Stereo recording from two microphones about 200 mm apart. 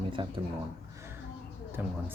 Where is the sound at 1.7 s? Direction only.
10° right (ahead or behind).